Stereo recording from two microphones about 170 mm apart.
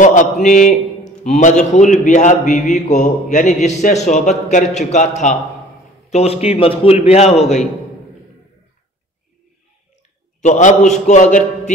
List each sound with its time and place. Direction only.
0.0 s a man's voice: 45° left (ahead or behind)
10.4 s a man's voice: 45° left (ahead or behind)